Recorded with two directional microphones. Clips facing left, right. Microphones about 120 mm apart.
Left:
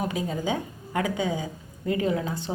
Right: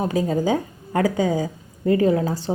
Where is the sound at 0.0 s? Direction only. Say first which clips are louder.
Right 7 dB; 35° right (ahead or behind).